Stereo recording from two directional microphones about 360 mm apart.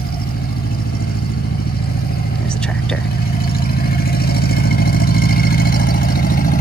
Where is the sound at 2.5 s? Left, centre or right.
Centre.